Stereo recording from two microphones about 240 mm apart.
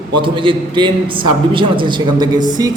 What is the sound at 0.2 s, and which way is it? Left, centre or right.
A man's voice, right.